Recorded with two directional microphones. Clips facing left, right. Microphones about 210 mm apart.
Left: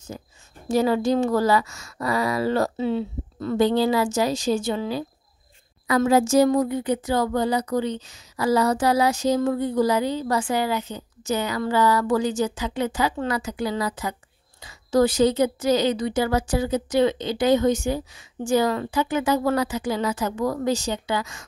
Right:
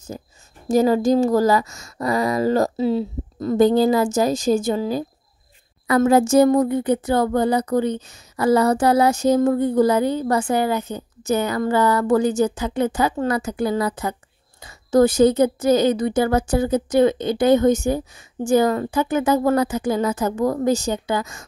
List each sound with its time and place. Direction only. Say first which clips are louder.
0.1 s a woman's voice: right 3 dB; 40° right (ahead or behind)